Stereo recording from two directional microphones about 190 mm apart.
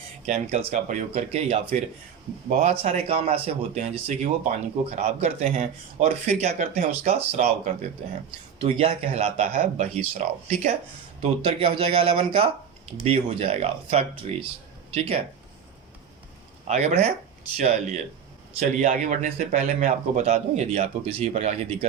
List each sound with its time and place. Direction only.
0.3 s a man's voice: 35° right (ahead or behind)
16.6 s a man's voice: 35° right (ahead or behind)